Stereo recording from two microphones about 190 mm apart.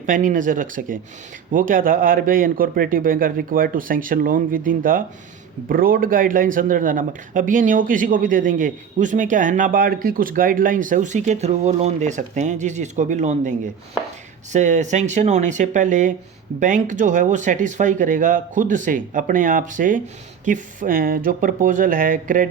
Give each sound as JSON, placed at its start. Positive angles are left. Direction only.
{"t": 0.0, "sound": "speech", "side_deg": -45}